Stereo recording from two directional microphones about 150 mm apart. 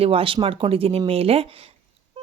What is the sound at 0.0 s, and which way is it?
Speech, 40° right (ahead or behind).